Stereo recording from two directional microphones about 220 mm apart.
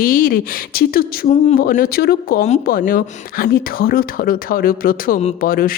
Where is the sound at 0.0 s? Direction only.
40° left (ahead or behind).